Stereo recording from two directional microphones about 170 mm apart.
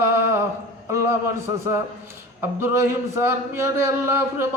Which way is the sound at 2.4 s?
15° right (ahead or behind).